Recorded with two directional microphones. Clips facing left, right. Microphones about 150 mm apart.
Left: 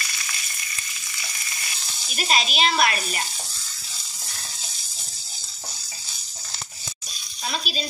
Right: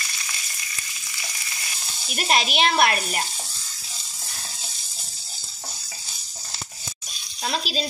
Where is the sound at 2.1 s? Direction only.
60° right (ahead or behind).